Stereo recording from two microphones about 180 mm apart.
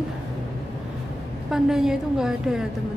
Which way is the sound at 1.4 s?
5° right (ahead or behind).